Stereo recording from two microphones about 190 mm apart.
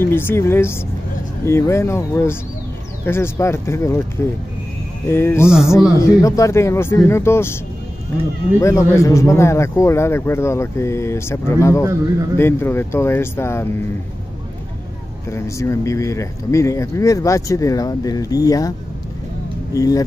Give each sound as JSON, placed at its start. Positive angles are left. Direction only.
{"t": 0.0, "sound": "speech", "side_deg": 10}
{"t": 5.0, "sound": "speech", "side_deg": 15}
{"t": 8.5, "sound": "speech", "side_deg": 15}
{"t": 15.2, "sound": "speech", "side_deg": 15}
{"t": 19.7, "sound": "speech", "side_deg": 20}